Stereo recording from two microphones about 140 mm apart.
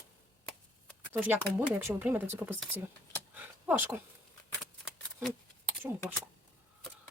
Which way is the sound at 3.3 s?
10° right (ahead or behind).